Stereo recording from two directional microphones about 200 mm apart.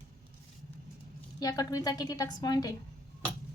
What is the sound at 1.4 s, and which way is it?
A woman's voice, 15° left (ahead or behind).